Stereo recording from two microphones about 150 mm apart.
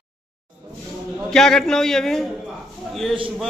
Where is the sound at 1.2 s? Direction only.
5° left (ahead or behind).